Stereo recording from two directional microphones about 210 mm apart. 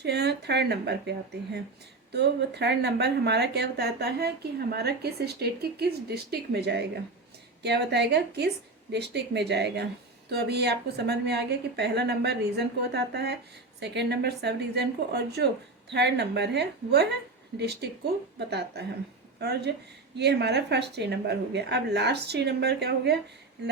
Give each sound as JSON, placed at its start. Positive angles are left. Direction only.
{"t": 0.0, "sound": "speech", "side_deg": -50}